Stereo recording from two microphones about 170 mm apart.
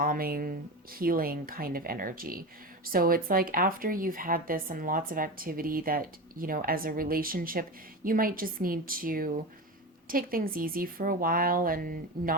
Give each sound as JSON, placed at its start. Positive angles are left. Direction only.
{"t": 0.0, "sound": "speech", "side_deg": -60}